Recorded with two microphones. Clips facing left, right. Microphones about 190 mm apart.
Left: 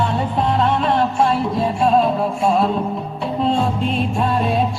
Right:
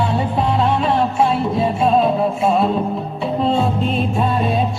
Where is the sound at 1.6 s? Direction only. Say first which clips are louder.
Right 1 dB; centre (ahead or behind).